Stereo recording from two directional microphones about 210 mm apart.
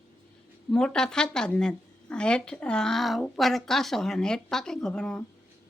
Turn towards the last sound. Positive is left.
turn(degrees=5)  # may be behind; listen again after turning